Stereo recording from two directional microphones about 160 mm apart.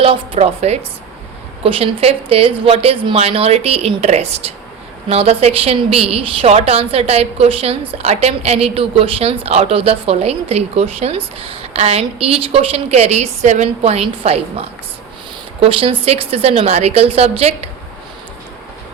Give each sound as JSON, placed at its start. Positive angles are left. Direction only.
{"t": 0.0, "sound": "a woman's voice", "side_deg": -35}